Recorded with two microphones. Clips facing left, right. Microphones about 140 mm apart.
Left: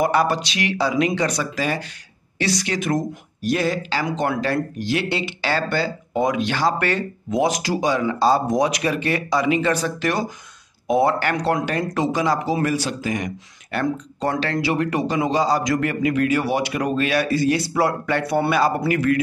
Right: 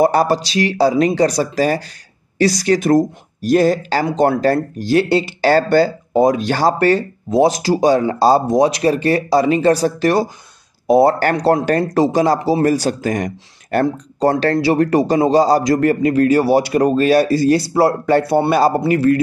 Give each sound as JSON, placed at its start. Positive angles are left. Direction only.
{"t": 0.0, "sound": "speech", "side_deg": -35}